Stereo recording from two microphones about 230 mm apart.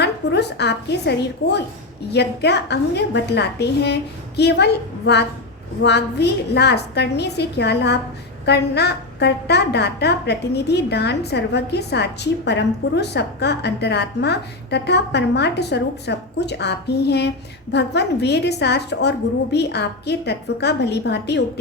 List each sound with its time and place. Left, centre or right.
0.0 s a woman's voice: left